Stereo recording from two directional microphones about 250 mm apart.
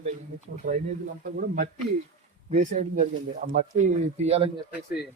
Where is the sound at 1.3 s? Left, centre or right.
Right.